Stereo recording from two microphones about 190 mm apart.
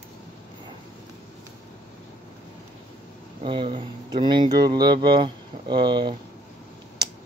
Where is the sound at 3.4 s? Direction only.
25° right (ahead or behind).